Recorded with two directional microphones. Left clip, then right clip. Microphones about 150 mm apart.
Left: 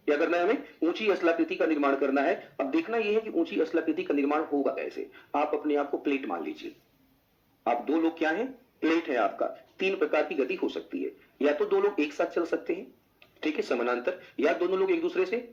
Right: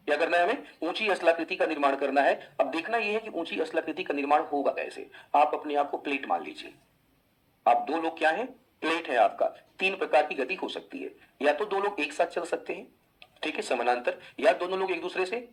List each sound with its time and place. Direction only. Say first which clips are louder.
0.0 s speech: right 1 dB; 45° right (ahead or behind)
7.6 s speech: right 2 dB; 40° right (ahead or behind)